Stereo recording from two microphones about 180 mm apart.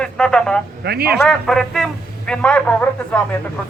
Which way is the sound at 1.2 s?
5° left (ahead or behind).